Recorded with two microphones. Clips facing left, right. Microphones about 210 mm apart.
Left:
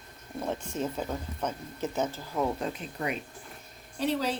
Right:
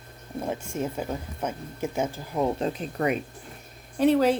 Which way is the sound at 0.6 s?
10° right (ahead or behind).